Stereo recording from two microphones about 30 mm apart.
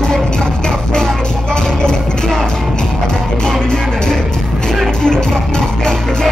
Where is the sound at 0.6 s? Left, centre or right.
Left.